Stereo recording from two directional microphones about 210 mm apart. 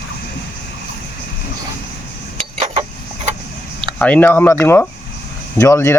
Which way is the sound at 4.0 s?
5° left (ahead or behind).